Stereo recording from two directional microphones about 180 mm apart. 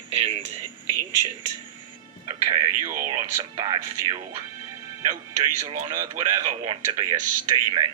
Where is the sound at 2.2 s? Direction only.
25° right (ahead or behind).